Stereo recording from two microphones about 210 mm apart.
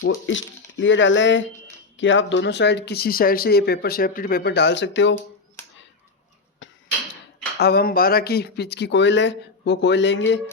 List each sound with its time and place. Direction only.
0.0 s speech: 70° left (ahead or behind)
6.6 s a sound: 60° left (ahead or behind)
7.6 s speech: 50° left (ahead or behind)